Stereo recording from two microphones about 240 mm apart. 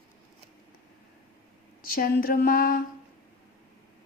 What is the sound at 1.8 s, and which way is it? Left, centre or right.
Speech, left.